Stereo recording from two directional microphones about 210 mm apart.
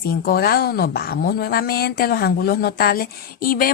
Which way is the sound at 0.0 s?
45° left (ahead or behind).